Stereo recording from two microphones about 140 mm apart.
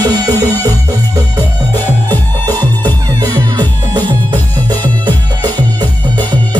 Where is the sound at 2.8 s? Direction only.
30° right (ahead or behind).